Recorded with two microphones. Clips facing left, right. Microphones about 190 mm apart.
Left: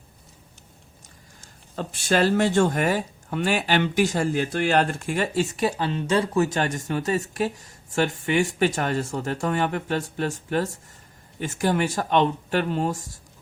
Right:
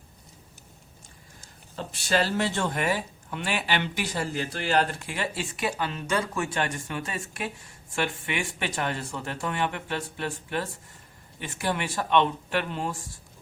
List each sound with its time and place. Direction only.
1.7 s speech: 50° left (ahead or behind)